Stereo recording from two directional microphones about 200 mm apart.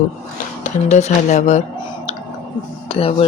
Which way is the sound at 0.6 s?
35° left (ahead or behind).